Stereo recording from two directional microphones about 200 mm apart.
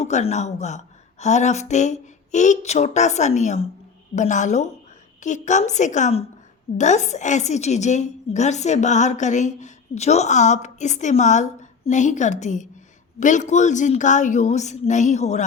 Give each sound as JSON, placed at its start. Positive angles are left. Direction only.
{"t": 0.0, "sound": "a woman's voice", "side_deg": 35}